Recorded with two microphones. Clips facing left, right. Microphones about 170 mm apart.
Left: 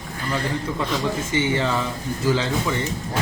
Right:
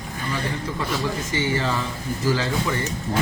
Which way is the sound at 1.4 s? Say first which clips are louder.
Left 2 dB; 20° left (ahead or behind).